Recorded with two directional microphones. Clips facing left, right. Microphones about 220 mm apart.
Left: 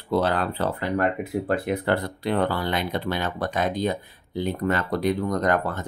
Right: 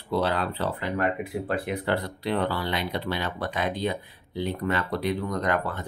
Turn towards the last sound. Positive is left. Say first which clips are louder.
# left 3 dB
turn(degrees=45)  # may be behind; listen again after turning